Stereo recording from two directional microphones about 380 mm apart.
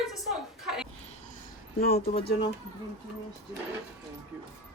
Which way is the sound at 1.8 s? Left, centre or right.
Left.